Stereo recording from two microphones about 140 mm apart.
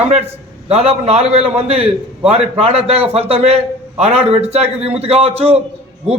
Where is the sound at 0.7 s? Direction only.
50° right (ahead or behind).